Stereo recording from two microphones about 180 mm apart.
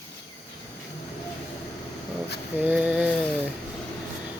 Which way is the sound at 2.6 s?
5° right (ahead or behind).